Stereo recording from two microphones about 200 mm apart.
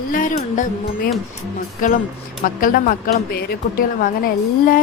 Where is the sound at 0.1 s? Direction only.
40° left (ahead or behind).